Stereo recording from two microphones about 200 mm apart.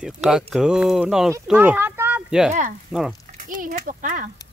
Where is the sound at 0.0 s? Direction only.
5° right (ahead or behind).